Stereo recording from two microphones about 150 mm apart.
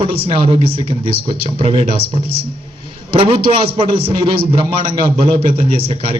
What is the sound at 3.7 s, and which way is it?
Speech, 40° right (ahead or behind).